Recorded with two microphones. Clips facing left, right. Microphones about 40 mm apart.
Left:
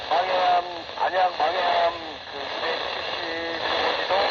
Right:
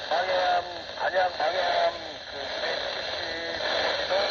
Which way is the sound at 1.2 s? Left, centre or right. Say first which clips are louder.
Left 3 dB; left.